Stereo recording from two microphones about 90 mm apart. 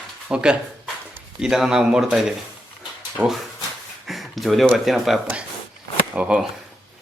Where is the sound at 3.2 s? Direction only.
20° right (ahead or behind).